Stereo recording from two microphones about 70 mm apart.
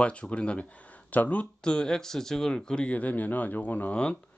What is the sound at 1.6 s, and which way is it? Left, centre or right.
Speech, centre.